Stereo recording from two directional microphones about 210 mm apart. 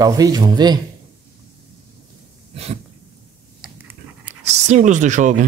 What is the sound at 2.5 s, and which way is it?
Speech, 30° right (ahead or behind).